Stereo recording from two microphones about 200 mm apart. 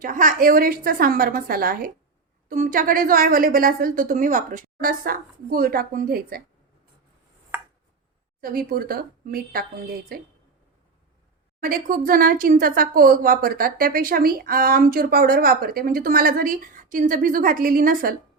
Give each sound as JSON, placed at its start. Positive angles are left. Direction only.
{"t": 0.0, "sound": "a woman's voice", "side_deg": -40}
{"t": 8.4, "sound": "a woman's voice", "side_deg": -45}
{"t": 11.6, "sound": "a woman's voice", "side_deg": -45}